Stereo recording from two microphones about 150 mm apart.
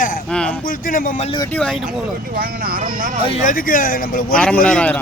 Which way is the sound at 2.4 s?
75° right (ahead or behind).